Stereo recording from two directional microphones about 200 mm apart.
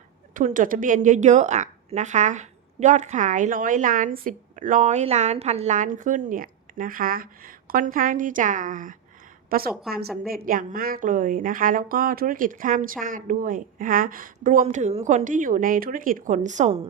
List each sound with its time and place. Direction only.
0.3 s a woman's voice: 40° right (ahead or behind)